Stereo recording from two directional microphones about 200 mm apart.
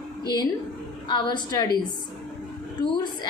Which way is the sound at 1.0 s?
20° left (ahead or behind).